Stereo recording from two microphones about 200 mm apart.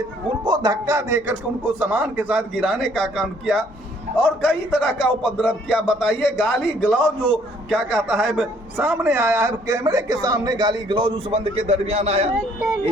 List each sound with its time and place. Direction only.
0.4 s a man's voice: 20° right (ahead or behind); by 4.9 s 5° left (ahead or behind)
5.2 s a man's voice: 5° right (ahead or behind); by 12.3 s 30° right (ahead or behind)